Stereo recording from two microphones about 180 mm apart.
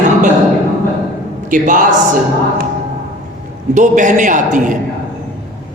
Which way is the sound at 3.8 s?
45° right (ahead or behind).